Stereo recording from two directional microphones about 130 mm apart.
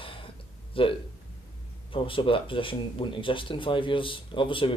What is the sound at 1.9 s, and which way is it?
Speech, 40° left (ahead or behind).